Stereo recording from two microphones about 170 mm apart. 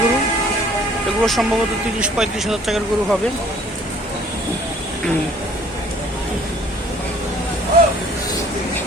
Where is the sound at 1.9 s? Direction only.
5° right (ahead or behind).